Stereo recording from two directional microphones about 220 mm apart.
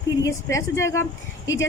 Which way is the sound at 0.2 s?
15° left (ahead or behind).